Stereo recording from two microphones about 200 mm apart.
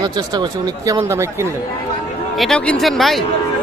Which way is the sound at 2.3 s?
Centre (ahead or behind).